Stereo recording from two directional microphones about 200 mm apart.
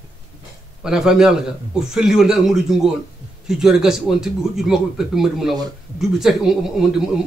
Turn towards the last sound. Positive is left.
turn(degrees=0)  # may be behind; listen again after turning